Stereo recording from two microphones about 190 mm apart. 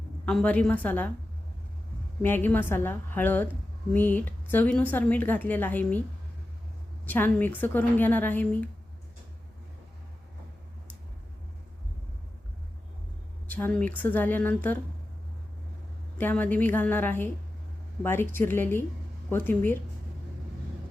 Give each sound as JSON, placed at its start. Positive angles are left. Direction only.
{"t": 0.3, "sound": "speech", "side_deg": 5}
{"t": 2.2, "sound": "speech", "side_deg": 10}
{"t": 7.0, "sound": "speech", "side_deg": 10}
{"t": 13.5, "sound": "speech", "side_deg": 10}
{"t": 16.1, "sound": "speech", "side_deg": 10}